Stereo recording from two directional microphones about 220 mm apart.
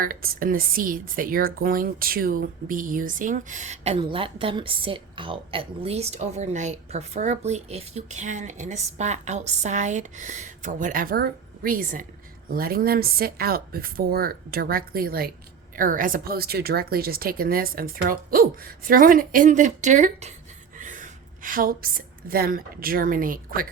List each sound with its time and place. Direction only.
0.0 s a woman's voice: 40° right (ahead or behind)